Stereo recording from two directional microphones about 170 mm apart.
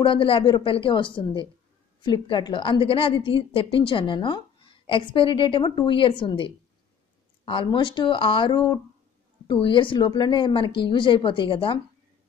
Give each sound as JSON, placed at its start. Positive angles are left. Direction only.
{"t": 0.0, "sound": "a woman's voice", "side_deg": 30}